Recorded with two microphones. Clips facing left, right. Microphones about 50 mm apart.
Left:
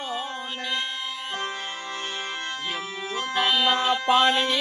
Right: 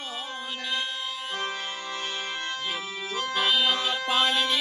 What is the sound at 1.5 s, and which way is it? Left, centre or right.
Music, left.